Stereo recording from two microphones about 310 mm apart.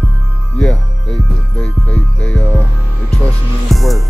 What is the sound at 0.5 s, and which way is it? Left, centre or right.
Music, centre.